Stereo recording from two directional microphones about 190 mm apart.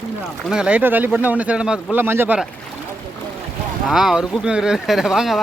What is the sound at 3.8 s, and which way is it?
Speech, centre (ahead or behind).